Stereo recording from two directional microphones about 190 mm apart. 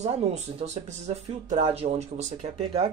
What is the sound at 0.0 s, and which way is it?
Speech, 35° right (ahead or behind).